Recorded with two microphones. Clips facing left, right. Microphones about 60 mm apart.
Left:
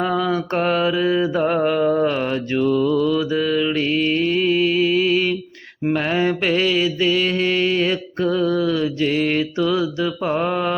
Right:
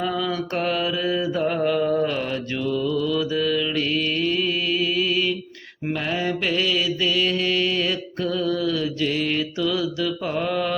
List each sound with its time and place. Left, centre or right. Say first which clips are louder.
0.0 s mantra: left 5 dB; left